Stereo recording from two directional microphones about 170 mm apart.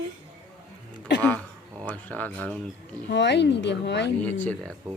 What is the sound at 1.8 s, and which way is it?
Speech, 10° left (ahead or behind).